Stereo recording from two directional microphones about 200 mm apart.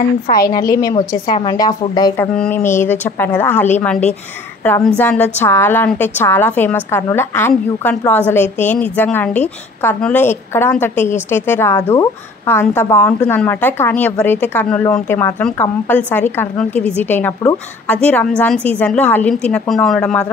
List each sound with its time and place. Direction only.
0.5 s a woman's voice: 20° left (ahead or behind)
2.3 s a woman's voice: 10° left (ahead or behind)